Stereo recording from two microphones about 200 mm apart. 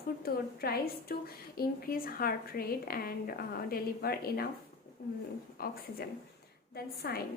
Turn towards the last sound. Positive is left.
turn(degrees=50)  # may be behind; listen again after turning